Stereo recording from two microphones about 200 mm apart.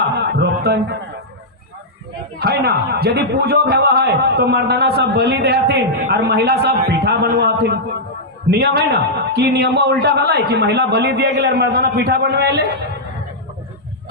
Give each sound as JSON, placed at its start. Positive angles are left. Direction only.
{"t": 0.0, "sound": "music", "side_deg": -55}
{"t": 2.4, "sound": "a man's voice", "side_deg": -50}